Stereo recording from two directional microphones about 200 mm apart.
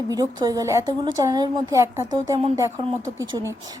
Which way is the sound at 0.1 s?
20° right (ahead or behind).